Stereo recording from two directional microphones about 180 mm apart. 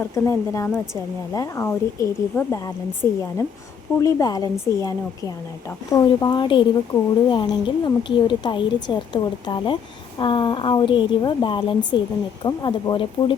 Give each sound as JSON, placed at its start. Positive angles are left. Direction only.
{"t": 0.0, "sound": "a woman's voice", "side_deg": 15}